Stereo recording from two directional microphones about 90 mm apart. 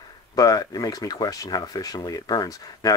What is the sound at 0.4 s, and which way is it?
Speech, 45° left (ahead or behind).